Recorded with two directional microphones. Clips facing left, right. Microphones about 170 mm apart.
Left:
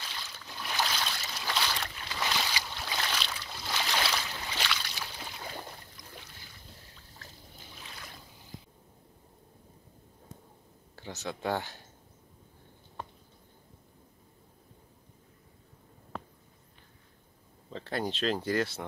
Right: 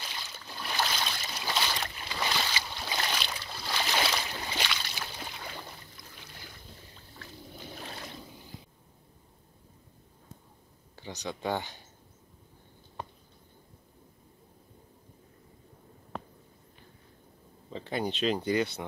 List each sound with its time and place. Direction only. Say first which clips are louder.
0.0 s boat: right 1 dB; 15° right (ahead or behind)
0.6 s boat: right 1 dB; centre (ahead or behind)
2.2 s boat: right 1 dB; centre (ahead or behind)
2.8 s a sound: right 2 dB; 10° right (ahead or behind)
4.0 s boat: right 2 dB; 15° right (ahead or behind)
7.2 s boat: right 5 dB; 40° left (ahead or behind)
7.5 s boat: right 9 dB; 50° right (ahead or behind)
11.0 s speech: even; 5° left (ahead or behind)
17.6 s speech: right 1 dB; 5° right (ahead or behind)